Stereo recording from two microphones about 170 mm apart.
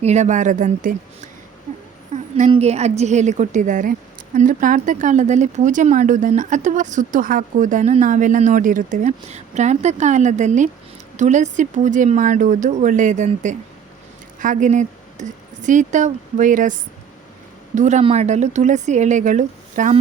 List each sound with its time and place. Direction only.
0.0 s speech: 40° right (ahead or behind)
2.3 s speech: 40° right (ahead or behind)
17.7 s speech: 45° right (ahead or behind)